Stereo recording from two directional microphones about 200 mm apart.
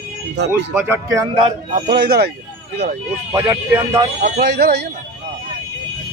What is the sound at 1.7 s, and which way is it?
Speech, 50° right (ahead or behind).